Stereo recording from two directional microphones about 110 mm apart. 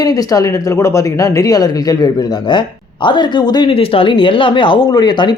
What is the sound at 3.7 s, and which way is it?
Speech, 55° left (ahead or behind).